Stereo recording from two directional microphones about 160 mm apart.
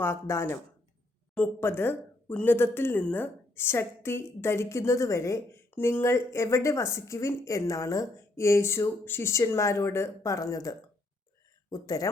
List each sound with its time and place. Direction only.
0.0 s speech: 15° left (ahead or behind)